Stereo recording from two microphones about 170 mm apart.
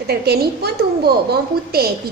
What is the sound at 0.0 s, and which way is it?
A woman's voice, 70° right (ahead or behind).